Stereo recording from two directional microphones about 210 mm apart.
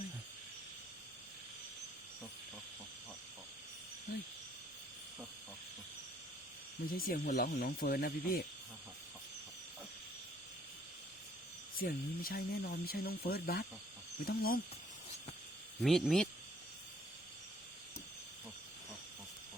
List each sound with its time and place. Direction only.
6.9 s speech: 45° left (ahead or behind)
11.8 s speech: 45° left (ahead or behind)
15.8 s speech: centre (ahead or behind)